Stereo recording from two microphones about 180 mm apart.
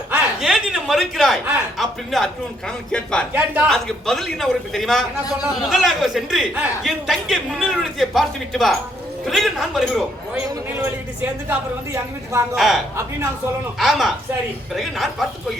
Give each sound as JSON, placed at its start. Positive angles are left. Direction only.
{"t": 0.1, "sound": "chuckle", "side_deg": -5}
{"t": 1.8, "sound": "speech", "side_deg": 0}
{"t": 3.3, "sound": "a man's voice", "side_deg": -10}
{"t": 3.7, "sound": "speech", "side_deg": 0}
{"t": 10.5, "sound": "a man's voice", "side_deg": -15}
{"t": 12.5, "sound": "speech", "side_deg": 0}